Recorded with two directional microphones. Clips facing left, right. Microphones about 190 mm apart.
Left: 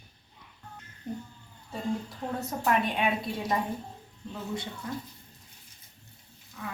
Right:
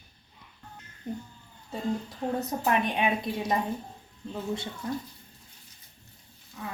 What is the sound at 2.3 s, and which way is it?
Speech, 20° right (ahead or behind).